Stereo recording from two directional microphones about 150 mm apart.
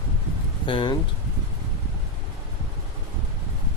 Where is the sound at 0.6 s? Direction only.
35° left (ahead or behind).